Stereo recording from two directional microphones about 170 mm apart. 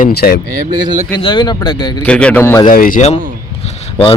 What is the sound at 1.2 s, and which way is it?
Speech, 25° left (ahead or behind).